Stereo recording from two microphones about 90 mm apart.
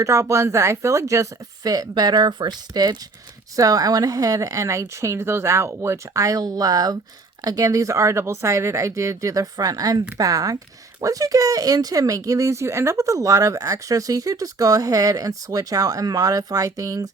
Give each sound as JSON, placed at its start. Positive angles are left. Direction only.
{"t": 0.0, "sound": "speech", "side_deg": -35}